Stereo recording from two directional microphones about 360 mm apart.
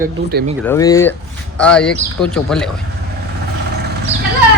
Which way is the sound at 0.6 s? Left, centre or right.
Centre.